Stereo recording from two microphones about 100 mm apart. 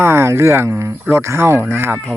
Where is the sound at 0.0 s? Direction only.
25° right (ahead or behind).